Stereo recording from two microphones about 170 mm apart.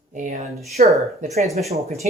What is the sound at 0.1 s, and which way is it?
Speech, 45° right (ahead or behind).